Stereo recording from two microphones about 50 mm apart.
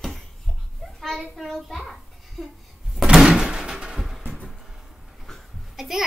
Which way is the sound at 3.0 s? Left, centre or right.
Centre.